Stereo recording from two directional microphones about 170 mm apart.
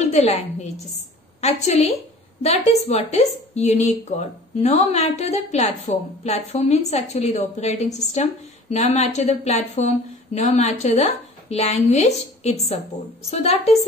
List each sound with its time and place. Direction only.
0.0 s a woman's voice: 40° left (ahead or behind)